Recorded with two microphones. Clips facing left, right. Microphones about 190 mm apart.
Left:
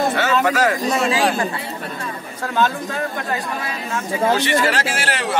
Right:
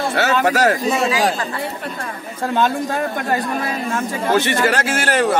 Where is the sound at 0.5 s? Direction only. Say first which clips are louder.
Right 2 dB; 40° right (ahead or behind).